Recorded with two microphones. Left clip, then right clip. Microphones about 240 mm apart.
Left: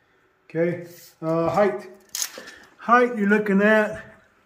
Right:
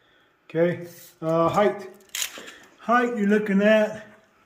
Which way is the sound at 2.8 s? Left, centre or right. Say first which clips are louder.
Left 4 dB; centre.